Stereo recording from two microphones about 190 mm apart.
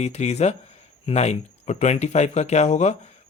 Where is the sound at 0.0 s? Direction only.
35° left (ahead or behind).